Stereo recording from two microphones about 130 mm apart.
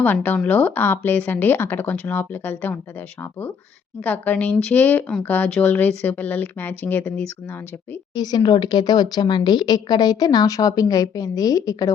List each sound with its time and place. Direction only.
0.0 s speech: 15° left (ahead or behind)
4.0 s speech: 10° left (ahead or behind)
8.1 s a woman's voice: 30° left (ahead or behind)